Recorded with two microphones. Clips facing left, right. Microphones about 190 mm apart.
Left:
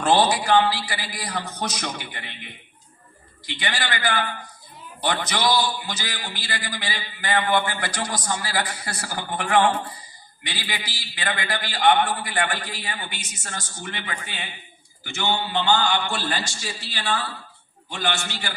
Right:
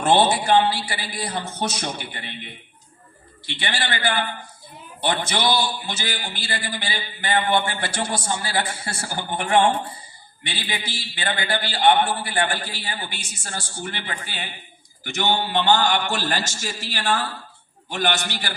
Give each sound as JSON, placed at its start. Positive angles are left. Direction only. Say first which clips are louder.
{"t": 0.0, "sound": "a man's voice", "louder": "right 1 dB", "side_deg": -25}